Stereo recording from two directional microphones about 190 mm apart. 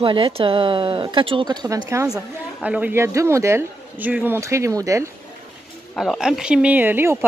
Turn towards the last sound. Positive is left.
turn(degrees=-10)  # may be behind; listen again after turning